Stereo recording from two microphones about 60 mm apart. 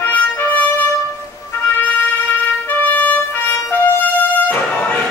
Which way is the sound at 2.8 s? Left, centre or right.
Left.